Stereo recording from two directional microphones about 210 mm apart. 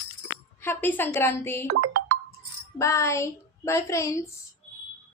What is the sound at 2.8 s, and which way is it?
A woman's voice, 15° left (ahead or behind).